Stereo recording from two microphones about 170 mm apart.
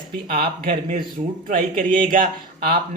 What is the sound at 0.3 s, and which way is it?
Speech, 55° right (ahead or behind).